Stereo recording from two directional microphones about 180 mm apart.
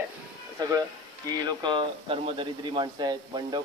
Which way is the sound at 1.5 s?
25° right (ahead or behind).